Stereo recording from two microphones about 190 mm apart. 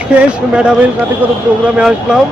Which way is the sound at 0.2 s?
5° right (ahead or behind).